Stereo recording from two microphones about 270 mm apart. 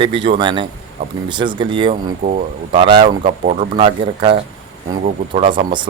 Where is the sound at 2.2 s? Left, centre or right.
Right.